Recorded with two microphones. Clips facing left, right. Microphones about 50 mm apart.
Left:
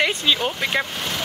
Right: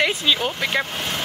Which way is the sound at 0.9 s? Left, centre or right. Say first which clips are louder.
Right 1 dB; right.